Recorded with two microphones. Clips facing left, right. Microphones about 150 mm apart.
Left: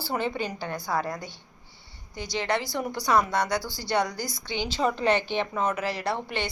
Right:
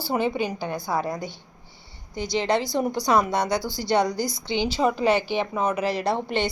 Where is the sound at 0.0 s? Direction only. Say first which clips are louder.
Right 4 dB; 15° right (ahead or behind).